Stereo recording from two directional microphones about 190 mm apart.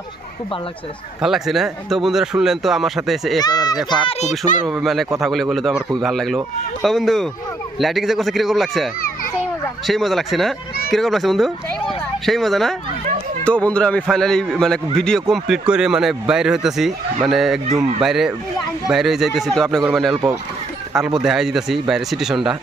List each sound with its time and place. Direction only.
1.2 s a man's voice: centre (ahead or behind)
3.3 s speech: 20° left (ahead or behind)
4.1 s speech: 35° left (ahead or behind)
4.6 s a man's voice: centre (ahead or behind)
9.8 s a man's voice: centre (ahead or behind)